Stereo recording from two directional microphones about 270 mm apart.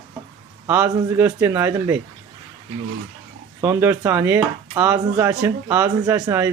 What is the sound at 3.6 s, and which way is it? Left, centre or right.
Speech, centre.